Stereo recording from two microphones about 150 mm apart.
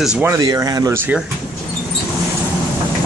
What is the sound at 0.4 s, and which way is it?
Speech, 25° right (ahead or behind).